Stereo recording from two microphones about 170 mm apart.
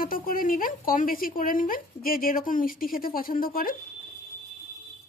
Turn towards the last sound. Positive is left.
turn(degrees=55)  # may be behind; listen again after turning